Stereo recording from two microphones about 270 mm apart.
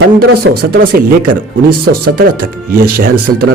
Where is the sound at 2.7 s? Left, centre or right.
Right.